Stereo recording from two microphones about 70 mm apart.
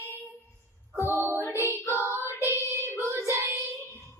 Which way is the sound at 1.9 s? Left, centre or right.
Right.